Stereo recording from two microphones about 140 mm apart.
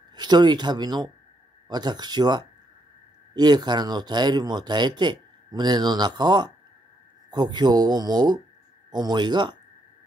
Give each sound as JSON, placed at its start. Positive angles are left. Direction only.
{"t": 0.1, "sound": "speech", "side_deg": -30}